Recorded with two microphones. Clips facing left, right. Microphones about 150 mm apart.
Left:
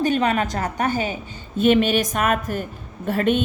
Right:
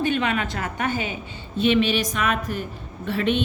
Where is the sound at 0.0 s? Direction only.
40° left (ahead or behind).